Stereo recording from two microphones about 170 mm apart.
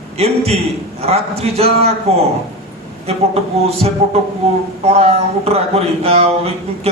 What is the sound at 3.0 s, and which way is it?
Speech, 35° right (ahead or behind).